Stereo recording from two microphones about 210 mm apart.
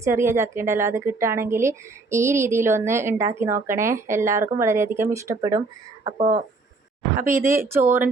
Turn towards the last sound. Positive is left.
turn(degrees=-10)  # may be behind; listen again after turning